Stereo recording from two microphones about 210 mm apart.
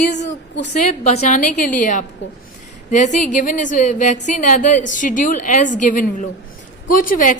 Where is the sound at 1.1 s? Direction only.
30° left (ahead or behind).